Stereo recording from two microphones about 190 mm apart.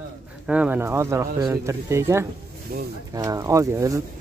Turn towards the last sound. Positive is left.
turn(degrees=-15)  # may be behind; listen again after turning